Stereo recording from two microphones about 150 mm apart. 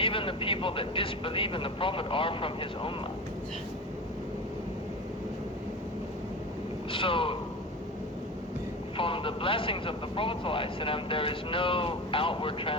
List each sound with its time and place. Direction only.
0.0 s a man's voice: 35° left (ahead or behind)
6.9 s a man's voice: 35° left (ahead or behind)
9.0 s a man's voice: 35° left (ahead or behind)